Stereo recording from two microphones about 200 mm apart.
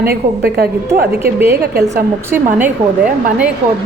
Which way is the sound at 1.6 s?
50° right (ahead or behind).